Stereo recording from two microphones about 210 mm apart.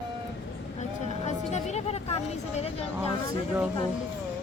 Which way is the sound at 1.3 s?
35° left (ahead or behind).